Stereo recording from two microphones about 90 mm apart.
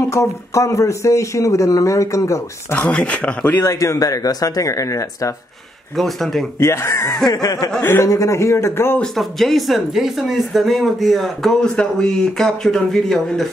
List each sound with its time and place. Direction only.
0.1 s speech: 35° left (ahead or behind)
2.7 s speech: 15° left (ahead or behind)
3.6 s speech: 35° left (ahead or behind)
5.9 s speech: centre (ahead or behind)
6.6 s a man's voice: 30° left (ahead or behind)
9.0 s speech: centre (ahead or behind)